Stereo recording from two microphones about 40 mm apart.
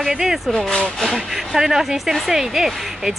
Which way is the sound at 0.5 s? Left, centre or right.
Centre.